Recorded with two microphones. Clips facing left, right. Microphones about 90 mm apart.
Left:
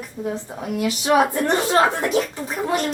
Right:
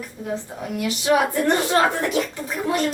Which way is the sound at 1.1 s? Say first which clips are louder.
Left 1 dB; 20° left (ahead or behind).